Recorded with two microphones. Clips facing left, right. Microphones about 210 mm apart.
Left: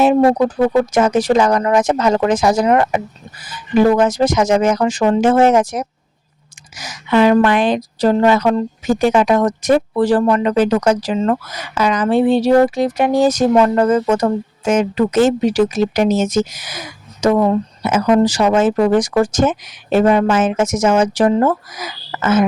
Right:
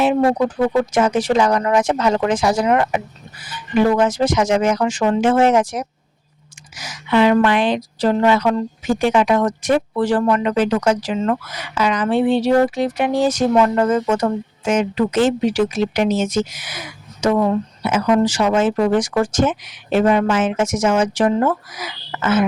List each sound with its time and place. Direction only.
0.0 s a woman's voice: 40° left (ahead or behind)